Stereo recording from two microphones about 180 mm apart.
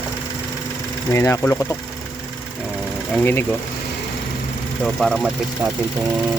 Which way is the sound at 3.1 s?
10° left (ahead or behind).